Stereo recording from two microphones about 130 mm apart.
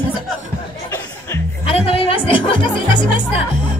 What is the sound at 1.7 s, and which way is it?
Speech, 45° left (ahead or behind).